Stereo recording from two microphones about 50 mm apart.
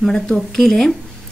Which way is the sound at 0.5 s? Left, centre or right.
Centre.